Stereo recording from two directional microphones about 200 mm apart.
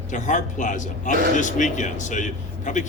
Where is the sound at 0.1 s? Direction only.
40° left (ahead or behind).